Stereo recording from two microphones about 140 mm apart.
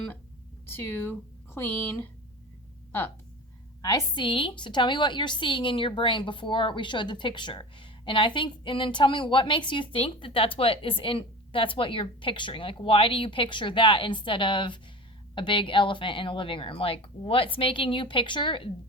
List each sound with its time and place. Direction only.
0.7 s a woman's voice: 15° left (ahead or behind)
3.8 s a woman's voice: 25° left (ahead or behind)